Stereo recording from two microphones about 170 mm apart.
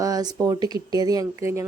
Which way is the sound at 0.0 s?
25° right (ahead or behind).